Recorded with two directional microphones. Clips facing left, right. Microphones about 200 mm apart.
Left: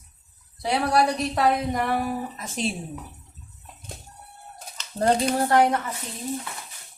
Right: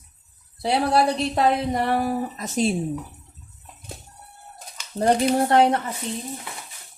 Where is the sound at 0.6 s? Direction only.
30° right (ahead or behind).